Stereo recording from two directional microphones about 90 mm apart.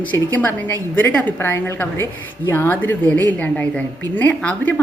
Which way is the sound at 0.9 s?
20° left (ahead or behind).